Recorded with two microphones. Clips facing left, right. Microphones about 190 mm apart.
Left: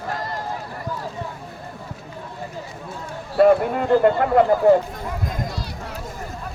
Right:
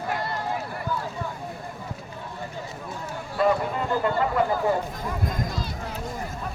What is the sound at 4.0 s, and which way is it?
Speech, 60° left (ahead or behind).